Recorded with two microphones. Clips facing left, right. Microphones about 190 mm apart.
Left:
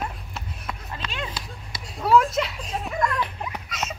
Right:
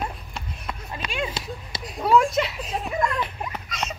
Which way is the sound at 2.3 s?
Centre (ahead or behind).